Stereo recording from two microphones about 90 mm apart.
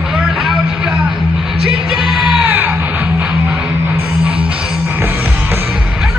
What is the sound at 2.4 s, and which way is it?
Music, 20° right (ahead or behind).